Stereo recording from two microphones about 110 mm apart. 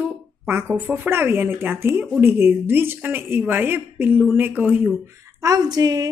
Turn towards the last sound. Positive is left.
turn(degrees=-35)  # may be behind; listen again after turning